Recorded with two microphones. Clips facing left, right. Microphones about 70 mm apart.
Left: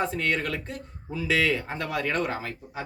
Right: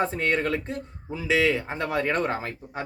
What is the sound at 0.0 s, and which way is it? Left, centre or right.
Speech, right.